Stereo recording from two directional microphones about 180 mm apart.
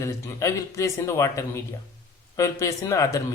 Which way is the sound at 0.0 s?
15° left (ahead or behind).